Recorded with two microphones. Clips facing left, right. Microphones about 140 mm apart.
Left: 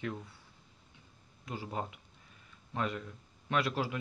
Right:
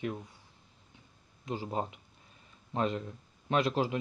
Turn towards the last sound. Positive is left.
turn(degrees=-20)  # may be behind; listen again after turning